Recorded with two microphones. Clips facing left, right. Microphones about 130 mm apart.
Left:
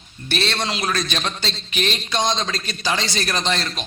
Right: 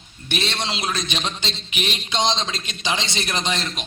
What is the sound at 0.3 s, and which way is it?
A man's voice, 15° right (ahead or behind).